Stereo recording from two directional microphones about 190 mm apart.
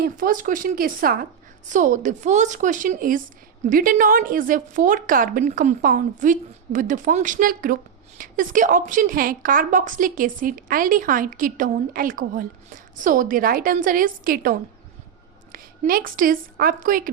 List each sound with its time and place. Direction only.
0.0 s a woman's voice: 45° right (ahead or behind)
15.5 s a woman's voice: 50° right (ahead or behind)